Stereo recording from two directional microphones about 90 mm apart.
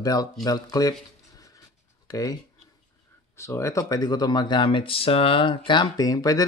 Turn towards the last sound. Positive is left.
turn(degrees=40)  # may be behind; listen again after turning